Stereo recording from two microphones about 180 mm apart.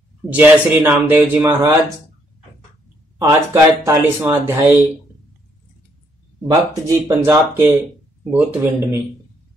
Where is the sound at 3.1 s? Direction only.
20° right (ahead or behind).